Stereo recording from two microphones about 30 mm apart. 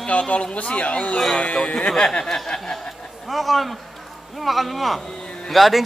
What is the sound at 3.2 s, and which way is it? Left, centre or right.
Speech, centre.